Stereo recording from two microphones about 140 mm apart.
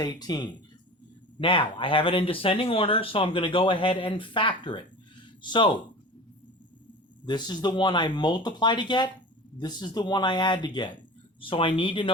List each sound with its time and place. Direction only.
0.0 s speech: 30° left (ahead or behind)
7.3 s speech: 30° left (ahead or behind)